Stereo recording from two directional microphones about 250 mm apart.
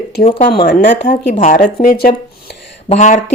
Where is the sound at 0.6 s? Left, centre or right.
Left.